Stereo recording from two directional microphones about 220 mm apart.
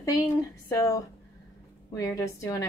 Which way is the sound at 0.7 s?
15° left (ahead or behind).